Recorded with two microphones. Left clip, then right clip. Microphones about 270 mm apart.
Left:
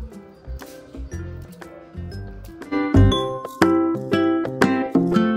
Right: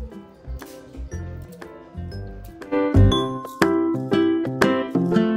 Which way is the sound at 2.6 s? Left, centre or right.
Centre.